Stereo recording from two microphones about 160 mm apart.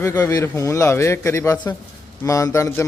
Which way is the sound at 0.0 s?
20° left (ahead or behind).